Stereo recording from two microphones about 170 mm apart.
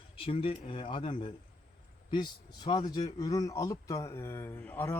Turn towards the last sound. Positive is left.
turn(degrees=10)  # may be behind; listen again after turning